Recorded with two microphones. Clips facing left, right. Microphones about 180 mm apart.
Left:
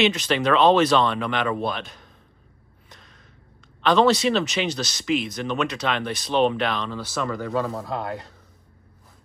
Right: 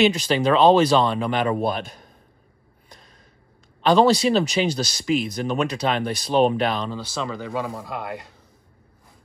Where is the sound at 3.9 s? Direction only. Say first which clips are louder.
Right 2 dB; 35° right (ahead or behind).